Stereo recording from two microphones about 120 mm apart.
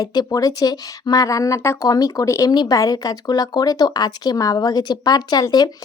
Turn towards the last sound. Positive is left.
turn(degrees=35)  # may be behind; listen again after turning